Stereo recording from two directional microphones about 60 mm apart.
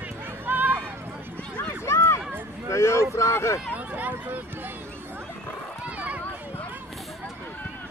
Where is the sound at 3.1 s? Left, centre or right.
Left.